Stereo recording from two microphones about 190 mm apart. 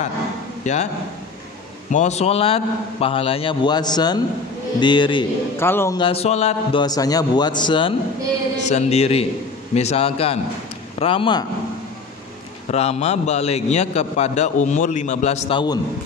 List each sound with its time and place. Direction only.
1.9 s a man's voice: 40° left (ahead or behind)
5.6 s a man's voice: 10° left (ahead or behind)
5.9 s a man's voice: 30° left (ahead or behind)
8.6 s a man's voice: 35° left (ahead or behind)
12.7 s a man's voice: 35° left (ahead or behind)